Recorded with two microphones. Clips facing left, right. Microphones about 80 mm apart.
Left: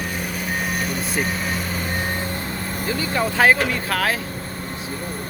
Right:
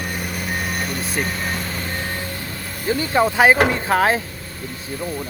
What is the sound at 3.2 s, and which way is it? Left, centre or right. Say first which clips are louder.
Speech: right 3 dB; right.